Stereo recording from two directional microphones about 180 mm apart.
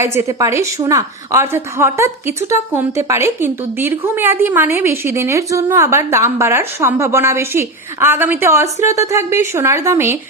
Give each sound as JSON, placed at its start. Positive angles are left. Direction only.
{"t": 0.0, "sound": "speech", "side_deg": -15}